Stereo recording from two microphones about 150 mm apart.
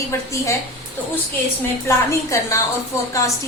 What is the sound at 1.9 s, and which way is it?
Speech, 20° left (ahead or behind).